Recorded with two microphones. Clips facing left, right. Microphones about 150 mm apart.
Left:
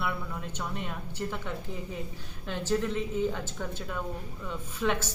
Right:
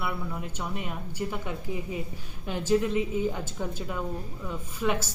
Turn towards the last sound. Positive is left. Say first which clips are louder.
# right 1 dB
turn(degrees=-5)  # may be behind; listen again after turning